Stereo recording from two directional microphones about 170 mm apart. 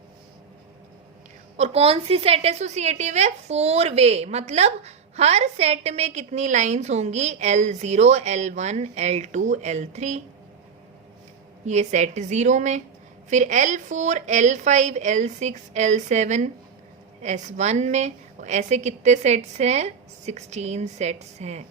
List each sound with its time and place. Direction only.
1.5 s a woman's voice: 40° right (ahead or behind)
11.6 s a woman's voice: 40° right (ahead or behind)